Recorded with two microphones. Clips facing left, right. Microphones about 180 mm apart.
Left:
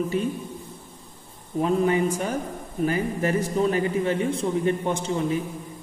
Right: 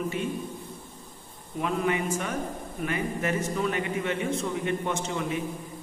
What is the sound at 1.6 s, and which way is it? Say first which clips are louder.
A man's voice: left 6 dB; 35° left (ahead or behind).